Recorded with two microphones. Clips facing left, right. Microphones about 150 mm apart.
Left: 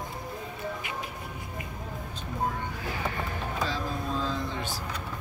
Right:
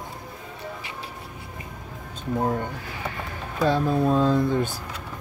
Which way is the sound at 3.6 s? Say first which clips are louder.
Right 11 dB; 60° right (ahead or behind).